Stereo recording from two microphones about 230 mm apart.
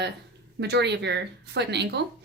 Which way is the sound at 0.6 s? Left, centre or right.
Right.